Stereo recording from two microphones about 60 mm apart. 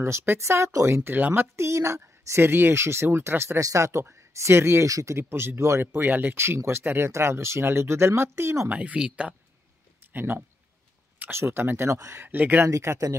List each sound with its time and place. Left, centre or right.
0.4 s speech: right
1.1 s speech: right
1.7 s speech: right
3.5 s speech: right
4.8 s speech: right
5.1 s speech: right
5.9 s speech: right
6.3 s speech: right
8.7 s speech: centre
10.1 s speech: right
12.2 s speech: right
12.6 s speech: right